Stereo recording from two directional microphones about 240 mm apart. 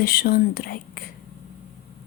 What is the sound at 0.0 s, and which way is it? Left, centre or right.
Speech, left.